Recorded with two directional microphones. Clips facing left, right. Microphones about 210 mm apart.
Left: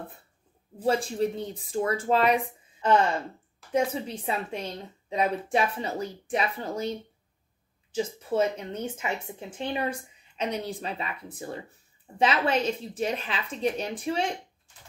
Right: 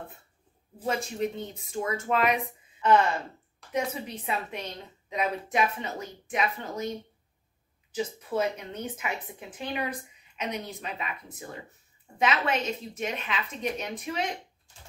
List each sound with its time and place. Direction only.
0.8 s a woman's voice: 30° left (ahead or behind)
7.9 s a woman's voice: 30° left (ahead or behind)